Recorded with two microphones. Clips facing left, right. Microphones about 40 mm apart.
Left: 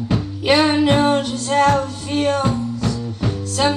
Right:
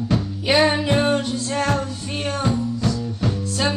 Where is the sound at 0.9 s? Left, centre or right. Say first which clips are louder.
Left 3 dB; left.